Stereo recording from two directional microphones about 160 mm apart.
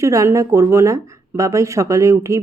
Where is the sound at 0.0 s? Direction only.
20° right (ahead or behind).